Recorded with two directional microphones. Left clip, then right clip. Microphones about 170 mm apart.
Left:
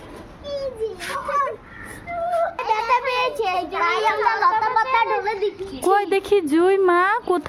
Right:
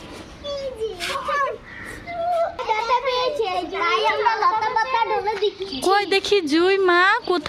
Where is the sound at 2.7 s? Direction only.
5° left (ahead or behind).